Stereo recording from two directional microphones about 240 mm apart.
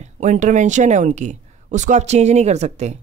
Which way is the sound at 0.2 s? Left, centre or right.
Right.